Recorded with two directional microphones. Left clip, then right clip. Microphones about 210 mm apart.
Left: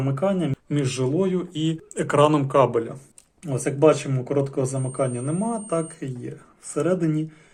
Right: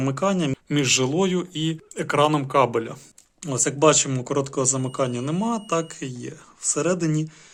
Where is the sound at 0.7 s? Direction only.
30° right (ahead or behind).